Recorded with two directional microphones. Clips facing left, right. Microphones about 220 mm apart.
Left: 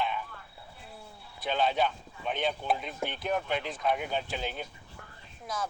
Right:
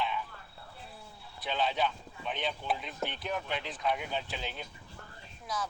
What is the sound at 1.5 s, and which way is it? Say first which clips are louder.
Speech: left 3 dB; 50° left (ahead or behind).